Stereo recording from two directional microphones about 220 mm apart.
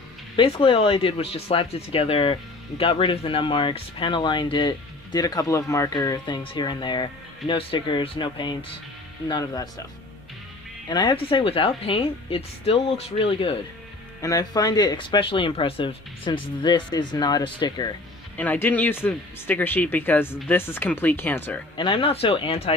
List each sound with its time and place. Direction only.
0.4 s speech: 25° left (ahead or behind)
10.9 s speech: 20° left (ahead or behind)
18.4 s speech: 10° left (ahead or behind)
21.7 s speech: 20° left (ahead or behind)